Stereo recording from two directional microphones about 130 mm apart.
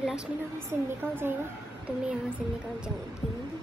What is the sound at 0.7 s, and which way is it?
Speech, 20° right (ahead or behind).